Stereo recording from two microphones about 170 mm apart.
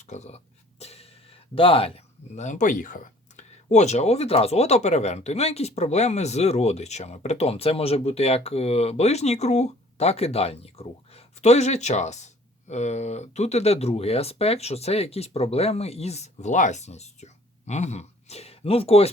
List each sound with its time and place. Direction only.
0.1 s speech: 40° left (ahead or behind)
0.8 s music: 35° left (ahead or behind)
2.3 s speech: 45° left (ahead or behind)